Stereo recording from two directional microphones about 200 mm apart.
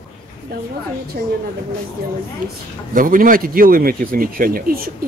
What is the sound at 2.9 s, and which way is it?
A woman's voice, 45° right (ahead or behind).